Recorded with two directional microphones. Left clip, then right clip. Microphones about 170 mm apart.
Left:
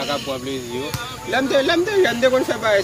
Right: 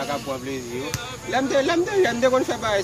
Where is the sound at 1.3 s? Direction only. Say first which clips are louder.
Left 3 dB; 20° right (ahead or behind).